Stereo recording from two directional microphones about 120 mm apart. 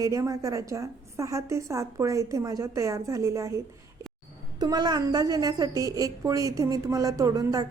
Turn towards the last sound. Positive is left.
turn(degrees=-30)  # may be behind; listen again after turning